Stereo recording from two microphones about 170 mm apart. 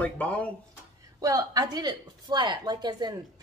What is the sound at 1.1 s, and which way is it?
Speech, 20° right (ahead or behind).